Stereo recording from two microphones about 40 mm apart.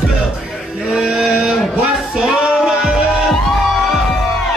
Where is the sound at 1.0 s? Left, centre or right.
Centre.